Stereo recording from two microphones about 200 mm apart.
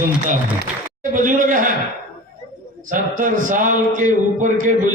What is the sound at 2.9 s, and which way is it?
A man's voice, 40° right (ahead or behind).